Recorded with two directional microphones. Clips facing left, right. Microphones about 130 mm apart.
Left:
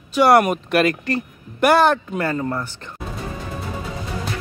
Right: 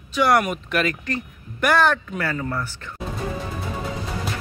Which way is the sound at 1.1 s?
35° left (ahead or behind).